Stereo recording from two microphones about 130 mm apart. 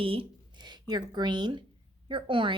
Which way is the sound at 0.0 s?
45° right (ahead or behind).